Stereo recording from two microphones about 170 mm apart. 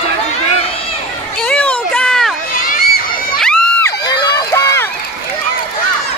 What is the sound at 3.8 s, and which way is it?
Crowd, 25° left (ahead or behind).